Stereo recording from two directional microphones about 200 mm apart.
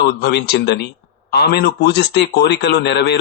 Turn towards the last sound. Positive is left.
turn(degrees=55)  # may be behind; listen again after turning